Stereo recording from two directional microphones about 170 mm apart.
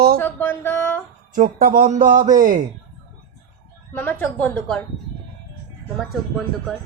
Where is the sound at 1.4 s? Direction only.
55° right (ahead or behind).